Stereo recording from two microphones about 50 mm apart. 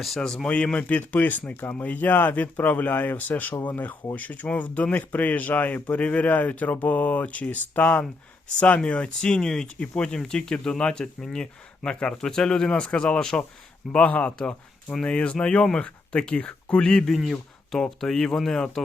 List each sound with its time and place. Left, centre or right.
0.4 s speech: left
17.0 s a man's voice: centre